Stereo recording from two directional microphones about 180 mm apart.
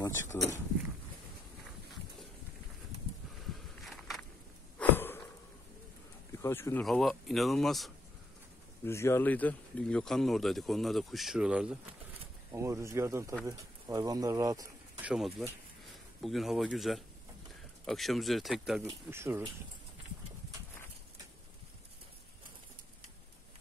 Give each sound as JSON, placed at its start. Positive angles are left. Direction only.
{"t": 0.3, "sound": "speech", "side_deg": 10}
{"t": 3.5, "sound": "a sound", "side_deg": 0}
{"t": 4.7, "sound": "a sound", "side_deg": 10}
{"t": 6.4, "sound": "speech", "side_deg": 15}
{"t": 6.8, "sound": "speech", "side_deg": 0}
{"t": 8.8, "sound": "speech", "side_deg": 15}
{"t": 12.5, "sound": "speech", "side_deg": -15}
{"t": 15.0, "sound": "speech", "side_deg": 0}
{"t": 19.0, "sound": "speech", "side_deg": -15}